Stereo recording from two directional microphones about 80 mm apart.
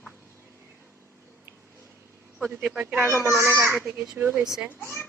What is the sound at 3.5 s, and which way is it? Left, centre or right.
Speech, right.